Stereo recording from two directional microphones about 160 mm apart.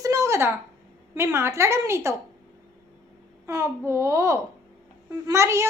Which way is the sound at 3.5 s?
20° right (ahead or behind).